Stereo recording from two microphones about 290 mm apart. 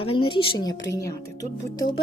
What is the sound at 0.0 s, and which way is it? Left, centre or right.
Speech, centre.